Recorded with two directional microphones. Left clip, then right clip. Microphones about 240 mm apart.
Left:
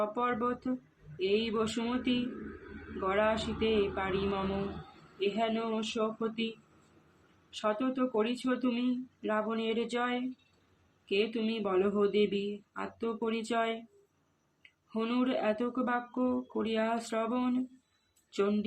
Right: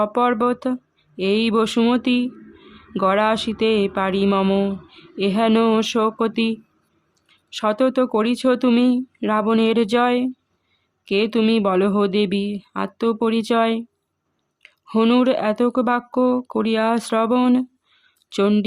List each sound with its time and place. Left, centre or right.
0.0 s speech: right
7.5 s speech: right